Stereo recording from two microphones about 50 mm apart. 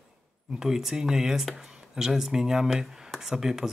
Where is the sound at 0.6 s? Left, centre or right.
Centre.